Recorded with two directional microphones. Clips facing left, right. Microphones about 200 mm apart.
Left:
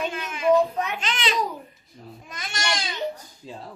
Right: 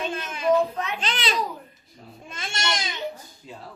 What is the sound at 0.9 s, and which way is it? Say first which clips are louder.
Speech: left 1 dB; 35° right (ahead or behind).